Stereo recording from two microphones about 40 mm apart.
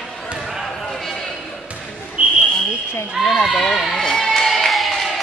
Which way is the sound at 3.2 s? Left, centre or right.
Centre.